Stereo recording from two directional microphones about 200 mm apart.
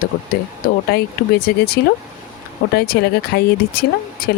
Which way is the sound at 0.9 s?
50° left (ahead or behind).